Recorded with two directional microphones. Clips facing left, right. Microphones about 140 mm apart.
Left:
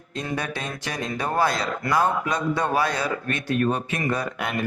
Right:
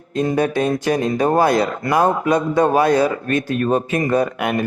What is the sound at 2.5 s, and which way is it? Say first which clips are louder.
Speech: right 8 dB; 45° right (ahead or behind).